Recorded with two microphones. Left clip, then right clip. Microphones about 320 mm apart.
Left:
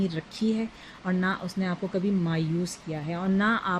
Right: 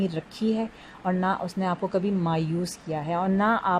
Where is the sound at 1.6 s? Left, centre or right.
Right.